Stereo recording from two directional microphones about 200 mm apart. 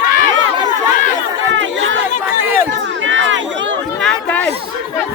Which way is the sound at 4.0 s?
5° left (ahead or behind).